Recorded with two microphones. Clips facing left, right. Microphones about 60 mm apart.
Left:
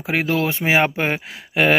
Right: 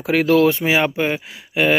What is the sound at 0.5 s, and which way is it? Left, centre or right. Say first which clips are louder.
Speech: even; left.